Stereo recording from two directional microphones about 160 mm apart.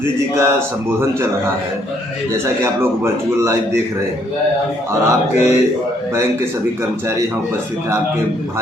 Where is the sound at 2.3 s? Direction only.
15° right (ahead or behind).